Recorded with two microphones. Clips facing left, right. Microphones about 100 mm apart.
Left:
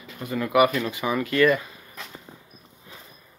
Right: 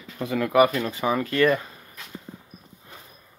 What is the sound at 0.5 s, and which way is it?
Speech, 30° right (ahead or behind).